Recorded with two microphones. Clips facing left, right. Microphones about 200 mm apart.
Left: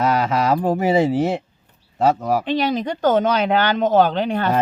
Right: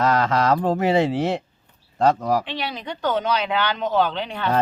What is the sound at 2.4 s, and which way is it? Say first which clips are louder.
Speech: left 10 dB; 45° left (ahead or behind).